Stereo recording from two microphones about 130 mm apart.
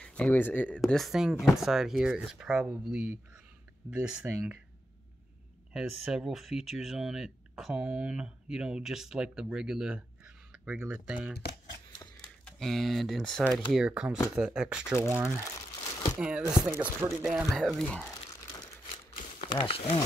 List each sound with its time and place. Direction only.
0.0 s speech: 10° left (ahead or behind)
0.7 s speech: centre (ahead or behind)
5.7 s speech: 5° right (ahead or behind)
12.4 s speech: 5° left (ahead or behind)
17.7 s speech: 10° left (ahead or behind)
19.4 s speech: 45° left (ahead or behind)